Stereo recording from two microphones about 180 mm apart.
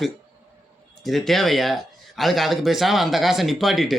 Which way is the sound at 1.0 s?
Centre (ahead or behind).